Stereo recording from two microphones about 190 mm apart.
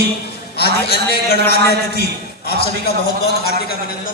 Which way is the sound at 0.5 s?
55° left (ahead or behind).